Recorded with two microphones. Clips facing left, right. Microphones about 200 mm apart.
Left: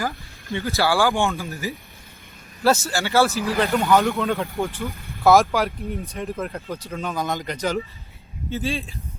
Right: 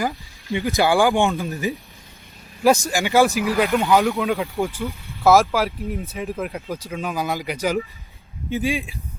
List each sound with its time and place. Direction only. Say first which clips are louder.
0.5 s speech: right 3 dB; 15° right (ahead or behind)
4.0 s speech: right 1 dB; centre (ahead or behind)